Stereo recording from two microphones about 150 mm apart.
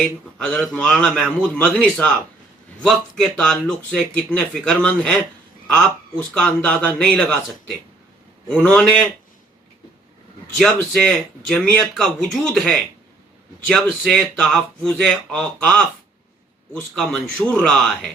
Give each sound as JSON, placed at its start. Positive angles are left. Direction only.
{"t": 0.0, "sound": "speech", "side_deg": 5}
{"t": 6.3, "sound": "a man's voice", "side_deg": 5}
{"t": 8.4, "sound": "a man's voice", "side_deg": 10}
{"t": 10.6, "sound": "speech", "side_deg": 5}
{"t": 14.0, "sound": "speech", "side_deg": 5}
{"t": 16.9, "sound": "speech", "side_deg": 5}